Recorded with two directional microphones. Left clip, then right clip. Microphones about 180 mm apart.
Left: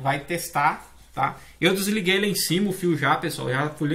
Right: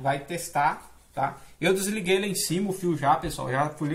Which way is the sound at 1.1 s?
40° right (ahead or behind).